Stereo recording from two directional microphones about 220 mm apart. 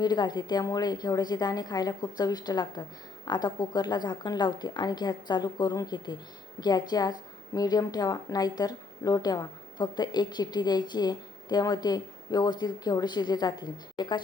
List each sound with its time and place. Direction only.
0.0 s a woman's voice: 20° left (ahead or behind)